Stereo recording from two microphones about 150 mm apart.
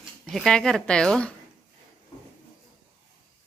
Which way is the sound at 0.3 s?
5° left (ahead or behind).